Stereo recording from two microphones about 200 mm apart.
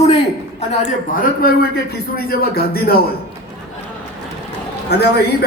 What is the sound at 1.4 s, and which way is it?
A man's voice, 45° left (ahead or behind).